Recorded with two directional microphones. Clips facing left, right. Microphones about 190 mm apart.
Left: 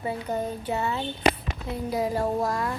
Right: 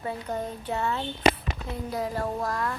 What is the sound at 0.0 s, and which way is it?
A child's voice, 5° left (ahead or behind).